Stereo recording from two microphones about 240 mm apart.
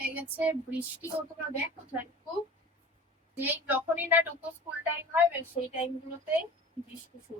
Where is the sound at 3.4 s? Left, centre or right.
Centre.